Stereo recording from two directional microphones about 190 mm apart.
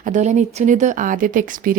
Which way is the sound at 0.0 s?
40° right (ahead or behind).